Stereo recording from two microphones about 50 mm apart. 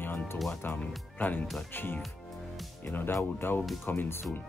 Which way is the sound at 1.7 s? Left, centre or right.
Left.